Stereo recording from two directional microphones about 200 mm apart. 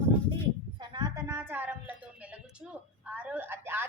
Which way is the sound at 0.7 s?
20° right (ahead or behind).